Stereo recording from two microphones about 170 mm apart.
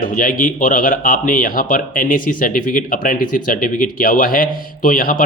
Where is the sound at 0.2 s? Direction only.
55° left (ahead or behind).